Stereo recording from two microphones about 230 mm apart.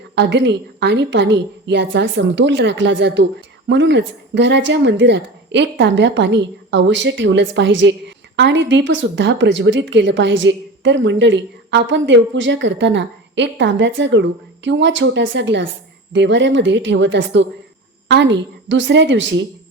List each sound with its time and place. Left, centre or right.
0.2 s a woman's voice: right